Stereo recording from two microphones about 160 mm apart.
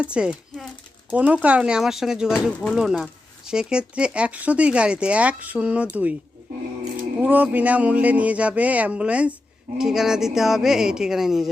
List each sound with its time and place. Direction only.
0.0 s speech: 5° right (ahead or behind)
7.2 s speech: 10° right (ahead or behind)